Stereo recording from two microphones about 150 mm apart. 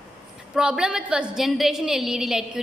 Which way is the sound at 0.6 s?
5° right (ahead or behind).